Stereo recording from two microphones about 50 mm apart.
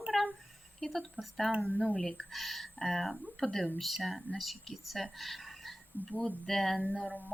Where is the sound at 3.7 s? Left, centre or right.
Centre.